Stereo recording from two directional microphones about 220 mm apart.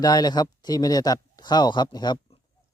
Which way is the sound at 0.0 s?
20° left (ahead or behind).